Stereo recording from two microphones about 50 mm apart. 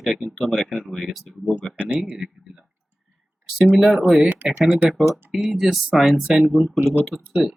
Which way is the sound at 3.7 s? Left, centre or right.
Centre.